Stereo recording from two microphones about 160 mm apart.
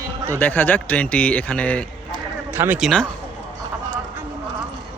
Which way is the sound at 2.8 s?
Centre (ahead or behind).